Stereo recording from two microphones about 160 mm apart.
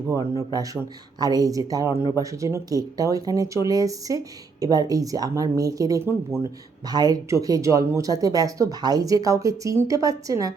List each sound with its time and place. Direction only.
0.1 s speech: 20° right (ahead or behind)